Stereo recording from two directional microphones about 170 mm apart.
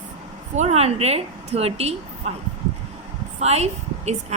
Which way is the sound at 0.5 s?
40° right (ahead or behind).